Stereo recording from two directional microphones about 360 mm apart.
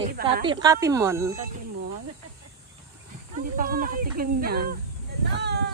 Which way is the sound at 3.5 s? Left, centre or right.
Right.